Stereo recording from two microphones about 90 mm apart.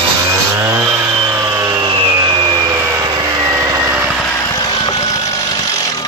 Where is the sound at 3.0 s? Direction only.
45° right (ahead or behind).